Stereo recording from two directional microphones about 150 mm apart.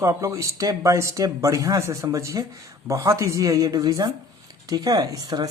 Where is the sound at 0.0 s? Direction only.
20° right (ahead or behind).